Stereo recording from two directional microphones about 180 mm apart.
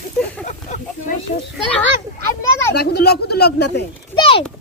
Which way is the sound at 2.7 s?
65° left (ahead or behind).